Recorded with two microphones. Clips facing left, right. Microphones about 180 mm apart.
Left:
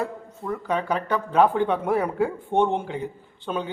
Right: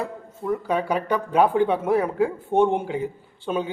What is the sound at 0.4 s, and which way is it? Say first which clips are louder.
Speech: right 2 dB; 10° right (ahead or behind).